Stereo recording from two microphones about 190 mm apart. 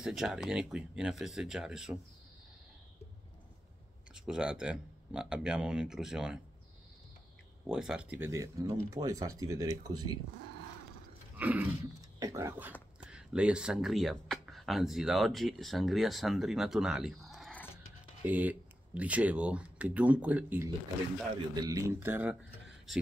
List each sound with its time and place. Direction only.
0.0 s speech: centre (ahead or behind)
4.1 s speech: 5° right (ahead or behind)
7.6 s speech: 5° right (ahead or behind)
8.2 s speech: 15° right (ahead or behind)
11.3 s dog: 10° right (ahead or behind)
12.2 s speech: 15° right (ahead or behind); by 17.6 s 5° left (ahead or behind)
18.2 s speech: 10° right (ahead or behind)